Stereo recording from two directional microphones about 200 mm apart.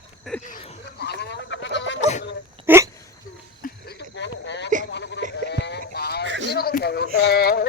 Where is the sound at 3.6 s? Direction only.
50° left (ahead or behind).